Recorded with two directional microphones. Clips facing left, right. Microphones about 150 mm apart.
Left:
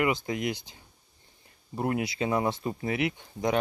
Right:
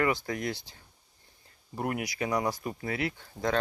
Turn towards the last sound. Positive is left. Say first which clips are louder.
# left 3 dB
turn(degrees=20)  # may be behind; listen again after turning